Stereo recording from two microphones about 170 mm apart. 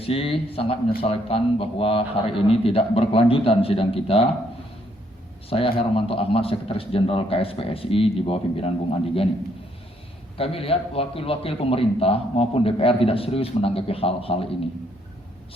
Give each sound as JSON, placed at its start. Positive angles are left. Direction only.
{"t": 0.0, "sound": "a man's voice", "side_deg": 35}
{"t": 5.5, "sound": "a man's voice", "side_deg": 30}
{"t": 10.3, "sound": "a man's voice", "side_deg": 35}